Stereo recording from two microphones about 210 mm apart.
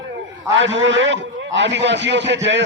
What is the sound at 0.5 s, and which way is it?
A man's voice, 60° right (ahead or behind).